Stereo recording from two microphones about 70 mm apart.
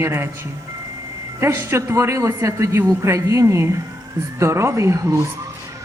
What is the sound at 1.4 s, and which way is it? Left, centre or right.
Speech, right.